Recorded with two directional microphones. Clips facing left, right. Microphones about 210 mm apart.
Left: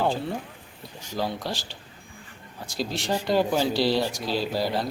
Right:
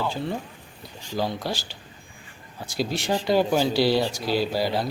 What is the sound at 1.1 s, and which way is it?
Speech, centre (ahead or behind).